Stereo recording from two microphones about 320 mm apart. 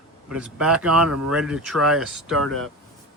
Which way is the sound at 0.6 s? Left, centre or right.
Right.